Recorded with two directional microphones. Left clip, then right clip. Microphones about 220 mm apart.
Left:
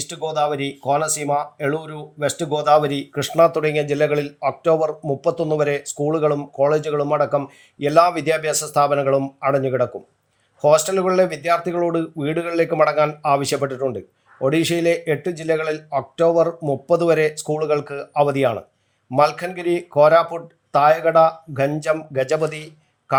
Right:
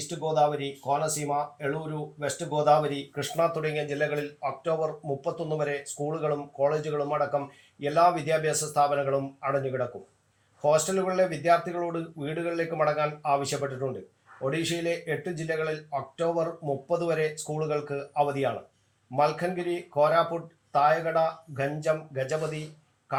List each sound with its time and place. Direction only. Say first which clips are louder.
0.1 s speech: left 4 dB; 50° left (ahead or behind)